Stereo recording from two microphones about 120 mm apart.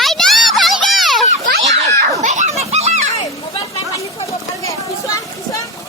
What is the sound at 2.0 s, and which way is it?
Children playing, 90° right.